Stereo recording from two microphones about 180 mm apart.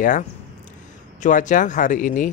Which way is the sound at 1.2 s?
45° left (ahead or behind).